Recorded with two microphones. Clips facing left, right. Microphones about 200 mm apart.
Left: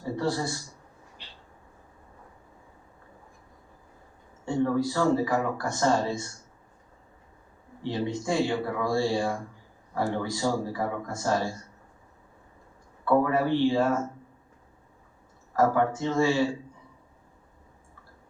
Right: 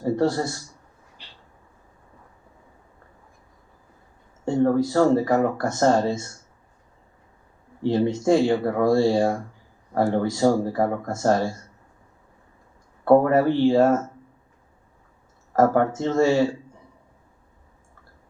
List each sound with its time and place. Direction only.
0.0 s a man's voice: 45° right (ahead or behind)
4.4 s speech: 45° right (ahead or behind)
7.8 s speech: 45° right (ahead or behind)
13.1 s speech: 45° right (ahead or behind)
15.5 s speech: 45° right (ahead or behind)